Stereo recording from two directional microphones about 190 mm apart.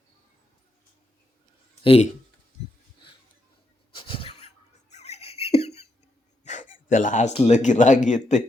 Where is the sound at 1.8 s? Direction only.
30° left (ahead or behind).